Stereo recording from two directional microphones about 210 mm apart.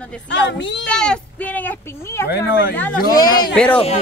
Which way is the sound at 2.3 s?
45° left (ahead or behind).